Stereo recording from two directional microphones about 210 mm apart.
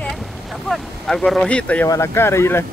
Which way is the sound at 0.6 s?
Centre (ahead or behind).